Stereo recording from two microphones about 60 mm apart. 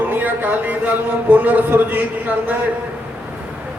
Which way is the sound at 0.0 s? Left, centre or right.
Right.